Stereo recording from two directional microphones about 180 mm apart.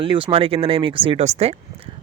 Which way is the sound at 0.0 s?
30° right (ahead or behind).